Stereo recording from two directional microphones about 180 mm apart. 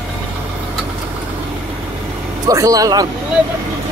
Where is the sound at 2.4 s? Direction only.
20° right (ahead or behind).